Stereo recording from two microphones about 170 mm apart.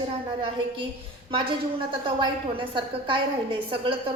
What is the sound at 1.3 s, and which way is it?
A woman's voice, 30° right (ahead or behind).